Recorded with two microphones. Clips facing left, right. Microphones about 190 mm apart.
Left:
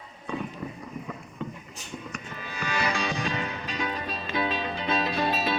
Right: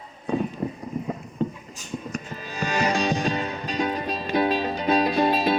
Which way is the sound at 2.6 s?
40° right (ahead or behind).